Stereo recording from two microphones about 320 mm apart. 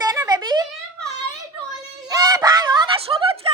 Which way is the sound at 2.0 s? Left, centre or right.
Centre.